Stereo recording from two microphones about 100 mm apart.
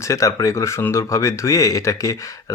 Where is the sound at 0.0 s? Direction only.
30° left (ahead or behind).